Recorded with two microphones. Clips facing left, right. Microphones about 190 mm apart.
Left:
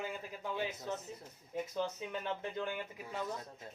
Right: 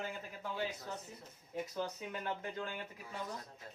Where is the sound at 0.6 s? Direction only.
20° left (ahead or behind).